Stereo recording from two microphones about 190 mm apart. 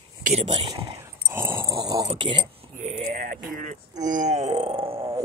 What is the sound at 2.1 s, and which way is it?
Speech, 25° right (ahead or behind).